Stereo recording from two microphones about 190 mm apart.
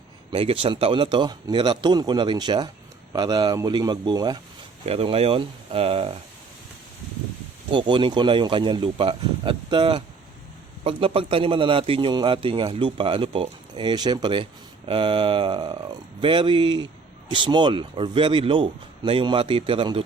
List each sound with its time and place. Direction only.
0.3 s a man's voice: 30° right (ahead or behind)
7.7 s a man's voice: 25° right (ahead or behind)